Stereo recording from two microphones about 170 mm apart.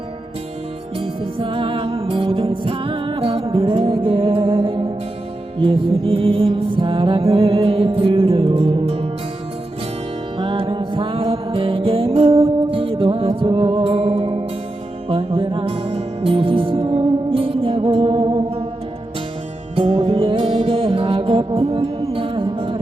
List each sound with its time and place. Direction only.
0.9 s music: 30° right (ahead or behind)
10.3 s music: 30° right (ahead or behind)
19.7 s music: 35° right (ahead or behind)